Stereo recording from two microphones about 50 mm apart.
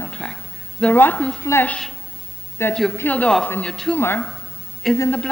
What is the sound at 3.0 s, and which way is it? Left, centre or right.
Speech, left.